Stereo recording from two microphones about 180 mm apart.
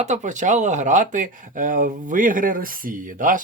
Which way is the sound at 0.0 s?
40° right (ahead or behind).